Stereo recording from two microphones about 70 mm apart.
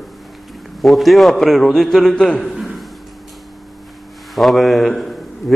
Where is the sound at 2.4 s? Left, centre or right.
Centre.